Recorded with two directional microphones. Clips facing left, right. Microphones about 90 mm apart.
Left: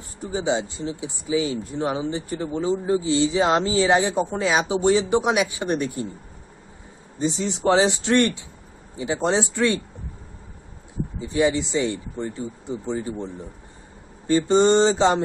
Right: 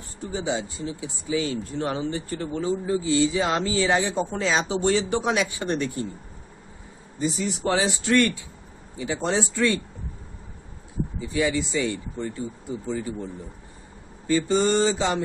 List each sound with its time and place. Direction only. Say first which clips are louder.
0.2 s speech: left 4 dB; 20° left (ahead or behind)
7.2 s speech: left 2 dB; 25° left (ahead or behind)
8.9 s speech: left 3 dB; 20° left (ahead or behind)
11.1 s speech: left 4 dB; 25° left (ahead or behind)